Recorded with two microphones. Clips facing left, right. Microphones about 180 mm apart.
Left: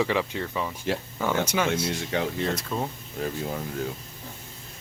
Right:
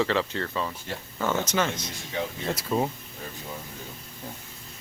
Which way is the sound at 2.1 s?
90° left.